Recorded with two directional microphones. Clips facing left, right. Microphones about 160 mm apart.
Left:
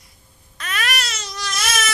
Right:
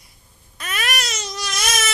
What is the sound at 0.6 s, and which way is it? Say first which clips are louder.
Baby cry: even; 15° right (ahead or behind).